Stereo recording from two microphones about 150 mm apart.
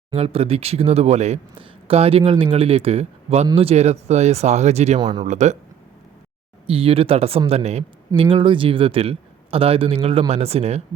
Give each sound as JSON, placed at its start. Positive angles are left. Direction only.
{"t": 0.1, "sound": "speech", "side_deg": -40}
{"t": 4.9, "sound": "speech", "side_deg": -30}
{"t": 5.2, "sound": "speech", "side_deg": -50}
{"t": 6.7, "sound": "speech", "side_deg": -40}